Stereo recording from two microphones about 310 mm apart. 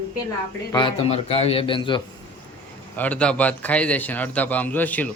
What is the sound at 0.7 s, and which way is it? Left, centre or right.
A man's voice, centre.